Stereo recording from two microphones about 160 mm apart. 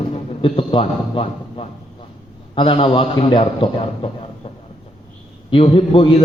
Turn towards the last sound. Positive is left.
turn(degrees=35)  # may be behind; listen again after turning